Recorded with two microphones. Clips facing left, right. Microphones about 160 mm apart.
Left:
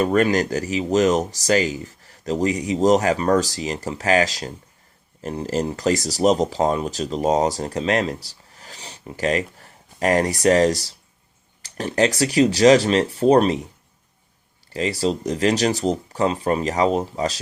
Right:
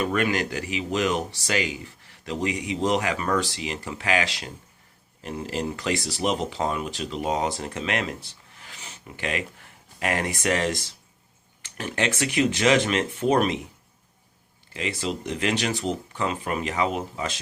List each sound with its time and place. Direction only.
0.0 s speech: 40° left (ahead or behind)
14.7 s speech: 35° left (ahead or behind)